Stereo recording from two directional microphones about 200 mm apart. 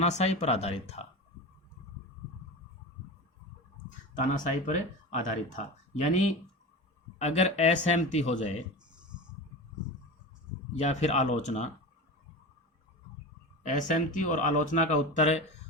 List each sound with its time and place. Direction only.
0.0 s speech: 35° left (ahead or behind)
4.6 s speech: 40° left (ahead or behind)
10.8 s speech: 35° left (ahead or behind)
13.6 s speech: 35° left (ahead or behind)